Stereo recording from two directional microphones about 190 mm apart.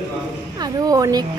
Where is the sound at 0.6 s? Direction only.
20° right (ahead or behind).